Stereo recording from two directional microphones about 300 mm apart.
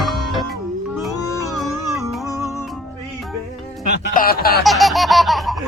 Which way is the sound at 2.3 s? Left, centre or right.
Centre.